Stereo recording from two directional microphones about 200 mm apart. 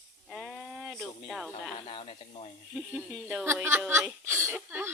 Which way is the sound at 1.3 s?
Centre (ahead or behind).